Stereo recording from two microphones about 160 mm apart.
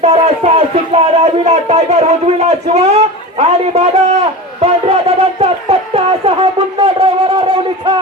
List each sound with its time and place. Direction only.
0.0 s a man's voice: 40° right (ahead or behind)